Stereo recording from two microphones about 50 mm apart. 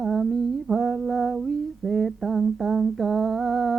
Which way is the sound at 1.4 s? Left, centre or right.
Centre.